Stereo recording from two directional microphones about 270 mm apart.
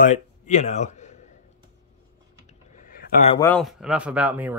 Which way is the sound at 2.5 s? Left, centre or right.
Left.